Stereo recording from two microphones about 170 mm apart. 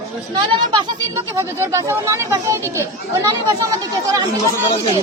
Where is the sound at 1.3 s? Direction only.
15° right (ahead or behind).